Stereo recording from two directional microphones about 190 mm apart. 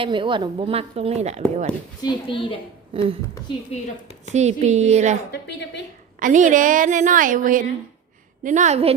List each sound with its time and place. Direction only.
0.0 s a woman's voice: 25° right (ahead or behind)
2.0 s speech: 25° left (ahead or behind)
2.9 s a woman's voice: 30° right (ahead or behind)
4.4 s a woman's voice: 35° right (ahead or behind)
5.3 s a woman's voice: 65° left (ahead or behind)
6.1 s a woman's voice: 45° right (ahead or behind)